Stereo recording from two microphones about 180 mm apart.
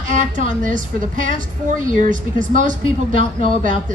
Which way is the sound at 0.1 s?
45° right (ahead or behind).